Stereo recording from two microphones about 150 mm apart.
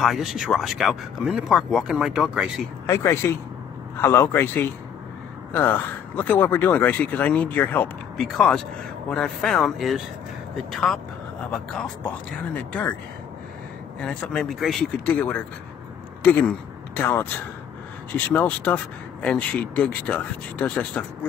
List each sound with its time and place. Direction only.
0.0 s speech: centre (ahead or behind)
2.9 s speech: 15° left (ahead or behind)
14.0 s speech: 5° left (ahead or behind)